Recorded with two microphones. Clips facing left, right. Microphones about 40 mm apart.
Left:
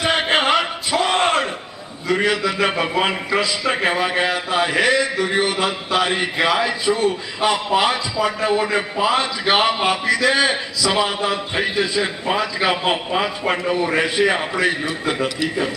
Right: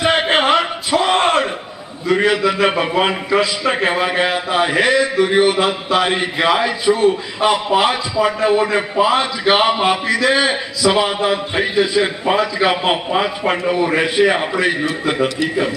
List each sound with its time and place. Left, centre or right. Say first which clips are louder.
0.0 s a sound: right 3 dB; centre
2.0 s a man's voice: right 4 dB; centre
12.3 s a man's voice: right 3 dB; centre